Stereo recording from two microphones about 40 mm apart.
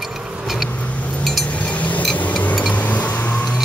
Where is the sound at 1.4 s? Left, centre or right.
Left.